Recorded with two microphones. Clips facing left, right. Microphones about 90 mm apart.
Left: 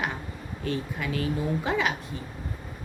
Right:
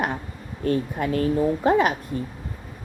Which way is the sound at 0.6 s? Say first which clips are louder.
Right 7 dB; 45° right (ahead or behind).